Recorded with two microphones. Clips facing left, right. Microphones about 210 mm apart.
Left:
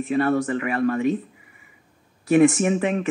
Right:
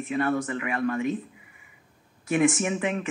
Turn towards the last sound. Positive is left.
turn(degrees=40)  # may be behind; listen again after turning